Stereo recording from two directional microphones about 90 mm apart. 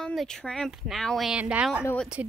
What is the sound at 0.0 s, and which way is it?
Speech, 5° left (ahead or behind).